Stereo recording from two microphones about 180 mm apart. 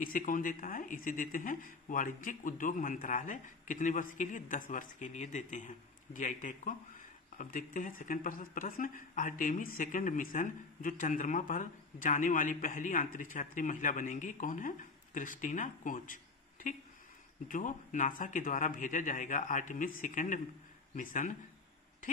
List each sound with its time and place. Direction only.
0.0 s speech: 50° left (ahead or behind)